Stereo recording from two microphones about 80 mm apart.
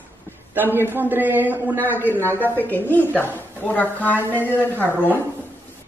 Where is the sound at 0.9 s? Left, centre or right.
Right.